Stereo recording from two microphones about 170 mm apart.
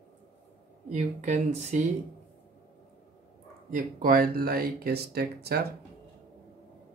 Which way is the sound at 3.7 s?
55° right (ahead or behind).